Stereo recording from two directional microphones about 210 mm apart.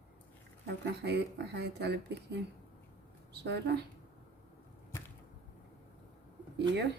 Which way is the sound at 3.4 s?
55° right (ahead or behind).